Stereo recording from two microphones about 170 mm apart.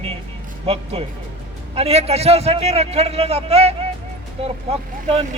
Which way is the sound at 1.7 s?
35° right (ahead or behind).